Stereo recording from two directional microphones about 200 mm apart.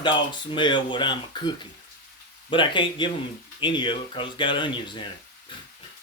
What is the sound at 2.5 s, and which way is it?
Speech, 25° left (ahead or behind).